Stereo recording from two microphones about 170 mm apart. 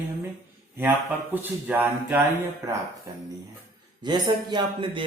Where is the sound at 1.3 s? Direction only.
10° right (ahead or behind).